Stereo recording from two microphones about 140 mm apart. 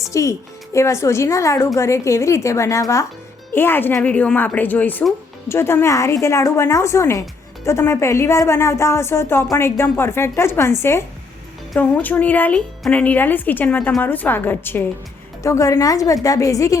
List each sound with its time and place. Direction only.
0.0 s a woman's voice: 20° left (ahead or behind)